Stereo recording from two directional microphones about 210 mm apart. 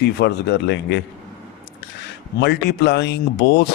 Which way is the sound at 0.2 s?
55° left (ahead or behind).